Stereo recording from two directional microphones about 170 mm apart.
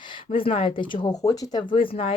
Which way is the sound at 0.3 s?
35° left (ahead or behind).